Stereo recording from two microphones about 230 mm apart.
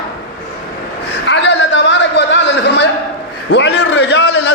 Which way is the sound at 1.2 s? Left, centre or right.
Left.